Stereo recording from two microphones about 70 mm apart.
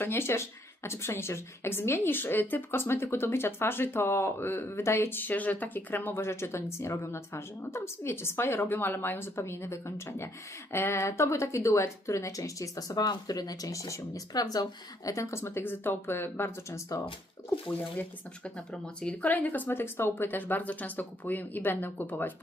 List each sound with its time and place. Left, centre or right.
0.0 s a woman's voice: left
16.6 s a woman's voice: left
19.0 s speech: left